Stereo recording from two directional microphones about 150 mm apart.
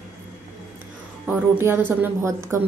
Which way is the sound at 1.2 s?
15° right (ahead or behind).